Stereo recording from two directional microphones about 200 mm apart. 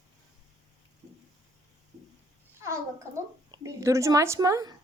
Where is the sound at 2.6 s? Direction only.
15° right (ahead or behind).